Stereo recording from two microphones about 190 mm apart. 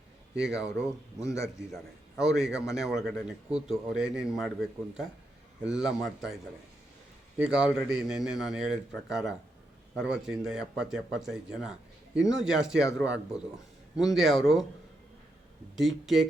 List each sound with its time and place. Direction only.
0.3 s speech: 5° right (ahead or behind)
1.2 s speech: 15° left (ahead or behind)
1.7 s a man's voice: centre (ahead or behind)
5.6 s speech: 5° right (ahead or behind)
15.7 s speech: centre (ahead or behind)